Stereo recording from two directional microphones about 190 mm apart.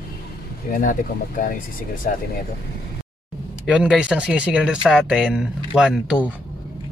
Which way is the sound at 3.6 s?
5° right (ahead or behind).